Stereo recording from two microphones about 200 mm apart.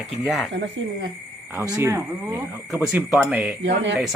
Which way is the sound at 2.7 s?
Centre (ahead or behind).